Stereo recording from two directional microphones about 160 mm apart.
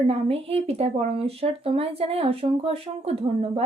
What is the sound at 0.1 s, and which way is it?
Speech, 35° right (ahead or behind).